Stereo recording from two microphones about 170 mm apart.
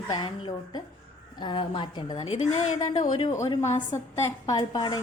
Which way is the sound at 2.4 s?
40° left (ahead or behind).